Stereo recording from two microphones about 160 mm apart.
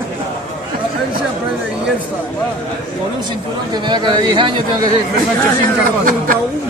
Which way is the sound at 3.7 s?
25° right (ahead or behind).